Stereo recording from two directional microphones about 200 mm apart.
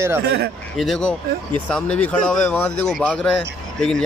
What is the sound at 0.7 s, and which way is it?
Speech, centre (ahead or behind).